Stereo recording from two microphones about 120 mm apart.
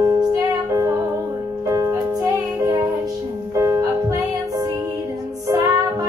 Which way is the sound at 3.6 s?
25° right (ahead or behind).